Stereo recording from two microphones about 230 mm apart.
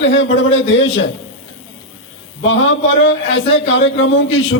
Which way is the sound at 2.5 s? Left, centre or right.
Left.